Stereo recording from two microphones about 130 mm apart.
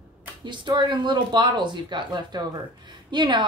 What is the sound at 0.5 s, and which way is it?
Speech, 35° right (ahead or behind).